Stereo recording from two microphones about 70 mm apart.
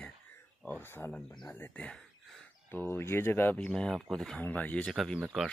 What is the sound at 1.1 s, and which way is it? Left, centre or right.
Speech, centre.